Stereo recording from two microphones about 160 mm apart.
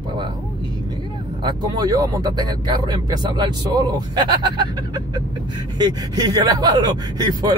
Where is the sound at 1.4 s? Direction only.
25° right (ahead or behind).